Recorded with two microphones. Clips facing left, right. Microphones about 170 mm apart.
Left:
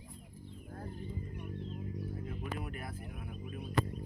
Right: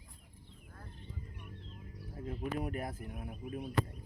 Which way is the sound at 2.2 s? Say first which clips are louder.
Right 4 dB; 35° right (ahead or behind).